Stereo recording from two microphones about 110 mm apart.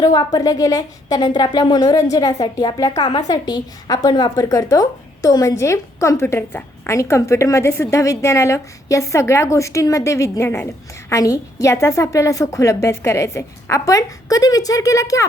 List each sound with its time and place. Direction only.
0.0 s speech: 40° left (ahead or behind)
2.9 s a woman's voice: 55° left (ahead or behind)
3.2 s a woman's voice: 40° left (ahead or behind)